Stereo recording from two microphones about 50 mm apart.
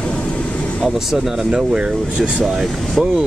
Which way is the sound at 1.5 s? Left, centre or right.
Centre.